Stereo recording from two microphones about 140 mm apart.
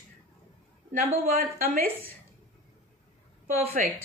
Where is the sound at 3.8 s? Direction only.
70° right (ahead or behind).